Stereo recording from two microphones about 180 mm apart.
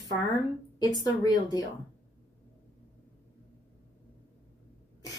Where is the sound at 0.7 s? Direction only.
20° left (ahead or behind).